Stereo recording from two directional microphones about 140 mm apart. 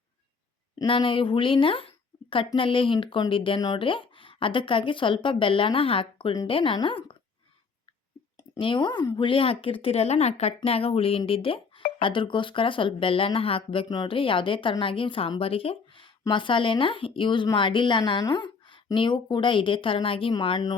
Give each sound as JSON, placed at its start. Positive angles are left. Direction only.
{"t": 0.9, "sound": "speech", "side_deg": 40}
{"t": 8.5, "sound": "speech", "side_deg": 35}